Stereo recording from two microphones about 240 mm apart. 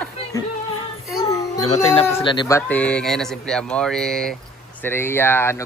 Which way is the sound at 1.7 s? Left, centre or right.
Left.